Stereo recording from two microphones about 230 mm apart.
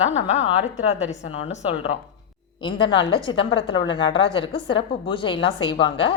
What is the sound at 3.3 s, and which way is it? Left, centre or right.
A woman's voice, left.